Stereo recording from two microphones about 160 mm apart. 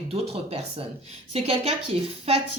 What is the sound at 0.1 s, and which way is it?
Speech, 40° right (ahead or behind).